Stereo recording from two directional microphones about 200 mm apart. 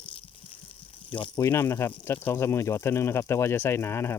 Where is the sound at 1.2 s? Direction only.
15° left (ahead or behind).